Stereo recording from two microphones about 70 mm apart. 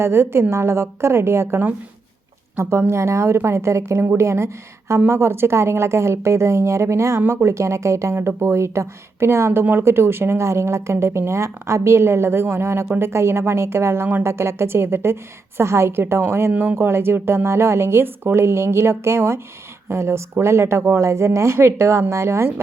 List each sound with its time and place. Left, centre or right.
0.0 s a woman's voice: right
16.5 s speech: right
16.7 s a woman's voice: right